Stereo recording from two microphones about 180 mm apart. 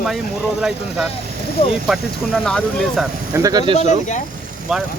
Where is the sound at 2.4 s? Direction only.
5° left (ahead or behind).